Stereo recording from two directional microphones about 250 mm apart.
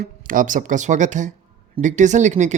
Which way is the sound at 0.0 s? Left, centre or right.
Right.